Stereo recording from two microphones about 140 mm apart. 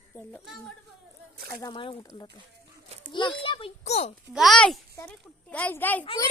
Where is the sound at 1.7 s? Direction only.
35° left (ahead or behind).